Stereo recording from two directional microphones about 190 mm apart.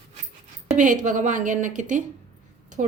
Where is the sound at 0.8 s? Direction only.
45° right (ahead or behind).